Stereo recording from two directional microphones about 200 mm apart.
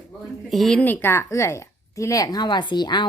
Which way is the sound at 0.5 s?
Centre (ahead or behind).